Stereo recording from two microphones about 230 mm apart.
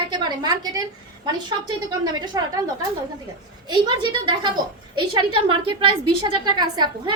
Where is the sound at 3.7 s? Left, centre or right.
Centre.